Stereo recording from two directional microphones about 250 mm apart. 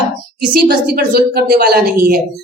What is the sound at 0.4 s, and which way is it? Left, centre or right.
A woman's voice, right.